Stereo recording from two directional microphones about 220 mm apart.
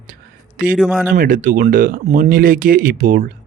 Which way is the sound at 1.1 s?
40° right (ahead or behind).